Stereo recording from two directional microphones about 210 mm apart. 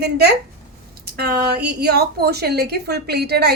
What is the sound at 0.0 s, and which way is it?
A woman's voice, 50° right (ahead or behind).